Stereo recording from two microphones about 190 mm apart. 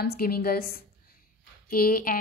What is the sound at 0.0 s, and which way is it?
A woman's voice, 55° left (ahead or behind).